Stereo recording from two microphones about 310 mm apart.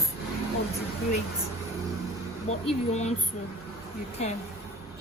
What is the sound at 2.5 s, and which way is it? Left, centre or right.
Speech, left.